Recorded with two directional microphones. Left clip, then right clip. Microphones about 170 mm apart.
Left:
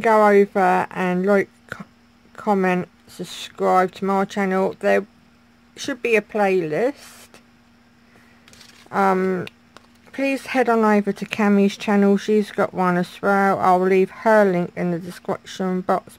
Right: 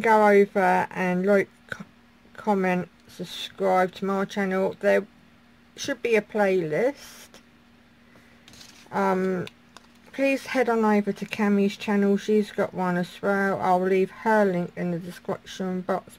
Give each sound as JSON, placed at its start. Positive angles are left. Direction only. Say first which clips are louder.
{"t": 0.0, "sound": "speech", "louder": "left 3 dB", "side_deg": 30}
{"t": 8.9, "sound": "speech", "louder": "left 6 dB", "side_deg": 30}